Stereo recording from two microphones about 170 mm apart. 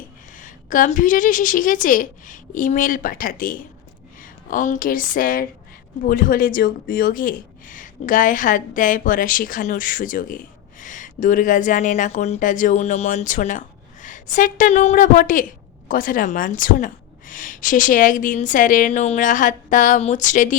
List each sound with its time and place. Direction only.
0.3 s speech: 50° left (ahead or behind)